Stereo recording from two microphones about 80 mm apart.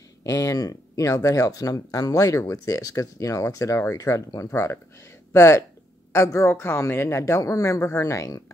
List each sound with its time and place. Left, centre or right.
0.2 s speech: left